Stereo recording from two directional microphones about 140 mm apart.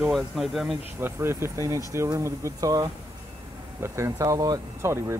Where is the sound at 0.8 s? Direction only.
15° right (ahead or behind).